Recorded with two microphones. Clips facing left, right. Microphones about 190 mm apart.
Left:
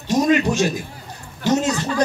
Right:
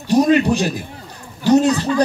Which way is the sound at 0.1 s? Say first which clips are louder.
Right 3 dB; 35° right (ahead or behind).